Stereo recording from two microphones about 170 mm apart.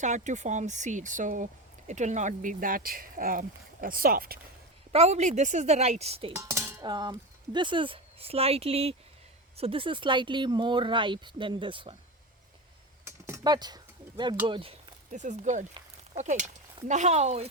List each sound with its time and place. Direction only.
0.0 s speech: 45° right (ahead or behind)
4.9 s a woman's voice: 40° right (ahead or behind)
6.3 s dishes: 15° right (ahead or behind)
6.8 s speech: 25° right (ahead or behind)
13.1 s a sound: 15° right (ahead or behind)
14.4 s a woman's voice: 30° right (ahead or behind)